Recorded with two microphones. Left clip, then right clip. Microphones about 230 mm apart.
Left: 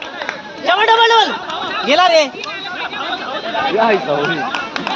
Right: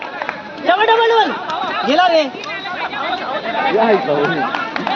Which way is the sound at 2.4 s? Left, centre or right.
Left.